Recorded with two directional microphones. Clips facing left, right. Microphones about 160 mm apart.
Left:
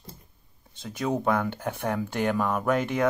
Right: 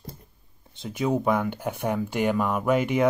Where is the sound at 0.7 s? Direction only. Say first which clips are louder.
Right 3 dB; 15° right (ahead or behind).